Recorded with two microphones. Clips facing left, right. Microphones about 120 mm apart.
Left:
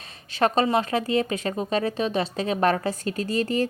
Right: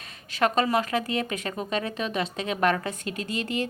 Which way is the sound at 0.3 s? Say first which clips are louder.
Left 2 dB; 30° left (ahead or behind).